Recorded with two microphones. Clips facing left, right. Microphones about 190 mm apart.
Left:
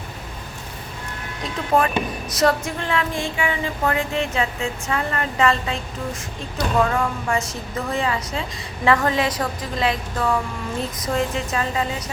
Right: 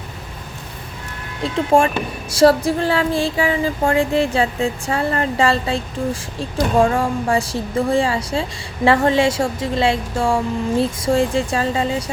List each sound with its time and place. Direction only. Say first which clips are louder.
1.5 s a woman's voice: right 5 dB; 30° right (ahead or behind)
2.3 s a sound: right 7 dB; 30° right (ahead or behind)
6.7 s a woman's voice: right 4 dB; 30° right (ahead or behind)